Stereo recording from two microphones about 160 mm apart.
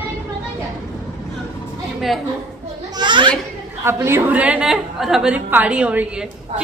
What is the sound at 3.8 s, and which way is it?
A woman's voice, 15° right (ahead or behind).